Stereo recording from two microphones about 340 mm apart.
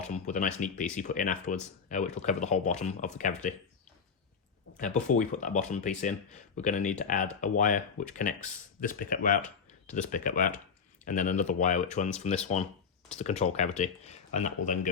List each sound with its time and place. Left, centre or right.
0.1 s speech: left
4.8 s speech: left